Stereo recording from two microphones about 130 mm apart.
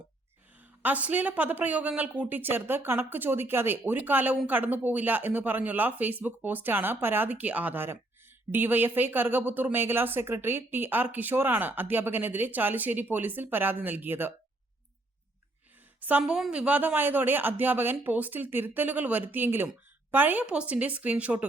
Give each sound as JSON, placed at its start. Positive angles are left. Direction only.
{"t": 0.8, "sound": "a woman's voice", "side_deg": -10}
{"t": 16.0, "sound": "a woman's voice", "side_deg": -10}